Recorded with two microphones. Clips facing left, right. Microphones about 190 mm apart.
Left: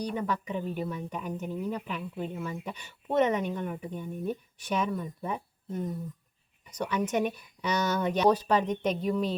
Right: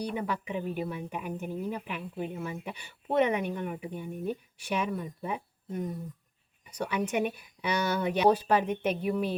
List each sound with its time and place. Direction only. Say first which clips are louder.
0.0 s speech: left 1 dB; 10° right (ahead or behind)